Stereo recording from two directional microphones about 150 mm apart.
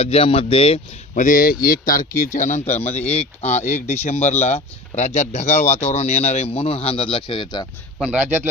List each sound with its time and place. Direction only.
0.0 s speech: 40° left (ahead or behind)
1.1 s speech: 65° left (ahead or behind); by 7.7 s 30° left (ahead or behind)
8.1 s a man's voice: 10° right (ahead or behind)